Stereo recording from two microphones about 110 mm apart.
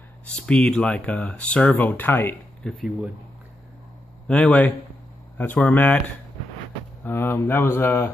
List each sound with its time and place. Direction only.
0.5 s speech: 10° left (ahead or behind)
2.6 s speech: 5° left (ahead or behind)
4.3 s speech: 10° left (ahead or behind)
7.0 s speech: 20° left (ahead or behind)